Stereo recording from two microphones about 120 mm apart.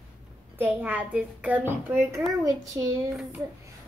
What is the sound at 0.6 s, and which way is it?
A child's voice, 15° right (ahead or behind).